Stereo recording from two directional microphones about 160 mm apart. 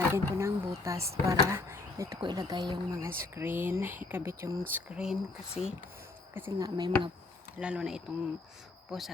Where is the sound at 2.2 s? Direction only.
25° right (ahead or behind).